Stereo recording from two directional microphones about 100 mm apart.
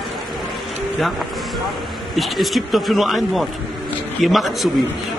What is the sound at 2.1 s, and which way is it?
Speech, centre (ahead or behind).